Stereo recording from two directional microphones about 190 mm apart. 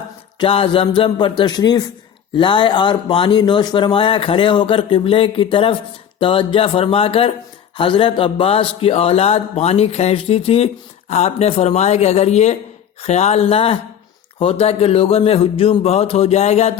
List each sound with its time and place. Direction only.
0.3 s speech: 30° left (ahead or behind)